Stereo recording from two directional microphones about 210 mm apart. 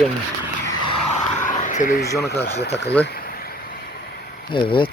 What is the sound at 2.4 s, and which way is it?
Speech, 50° left (ahead or behind).